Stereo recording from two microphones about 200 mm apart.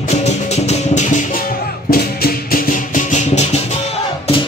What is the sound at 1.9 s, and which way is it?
Music, 50° left (ahead or behind).